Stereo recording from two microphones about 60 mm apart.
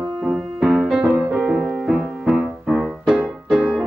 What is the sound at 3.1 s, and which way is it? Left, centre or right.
Music, centre.